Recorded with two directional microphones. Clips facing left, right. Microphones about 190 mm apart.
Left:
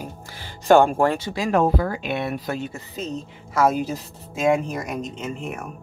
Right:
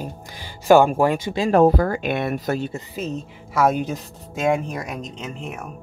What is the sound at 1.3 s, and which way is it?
Speech, 25° right (ahead or behind).